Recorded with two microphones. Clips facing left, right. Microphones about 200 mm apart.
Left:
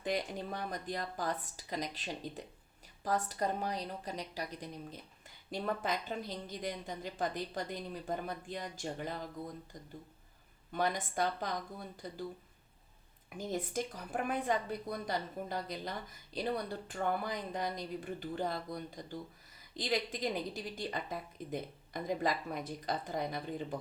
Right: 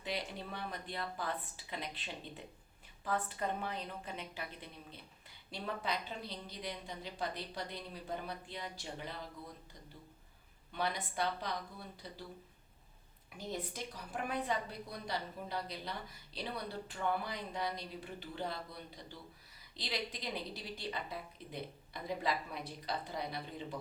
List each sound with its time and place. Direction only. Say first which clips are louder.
0.0 s a woman's voice: left 5 dB; 45° left (ahead or behind)
10.7 s a woman's voice: left 4 dB; 45° left (ahead or behind)
13.3 s a woman's voice: left 6 dB; 45° left (ahead or behind)